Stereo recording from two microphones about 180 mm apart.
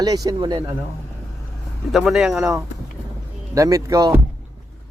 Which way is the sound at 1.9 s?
Centre (ahead or behind).